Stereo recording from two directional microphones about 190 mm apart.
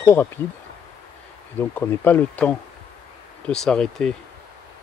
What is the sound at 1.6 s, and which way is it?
Speech, 10° left (ahead or behind).